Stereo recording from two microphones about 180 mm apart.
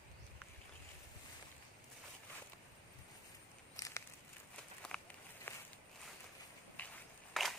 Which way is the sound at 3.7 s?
20° left (ahead or behind).